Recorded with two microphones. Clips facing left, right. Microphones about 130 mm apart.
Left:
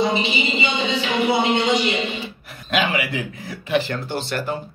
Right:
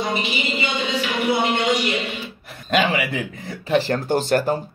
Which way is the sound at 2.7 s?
5° left (ahead or behind).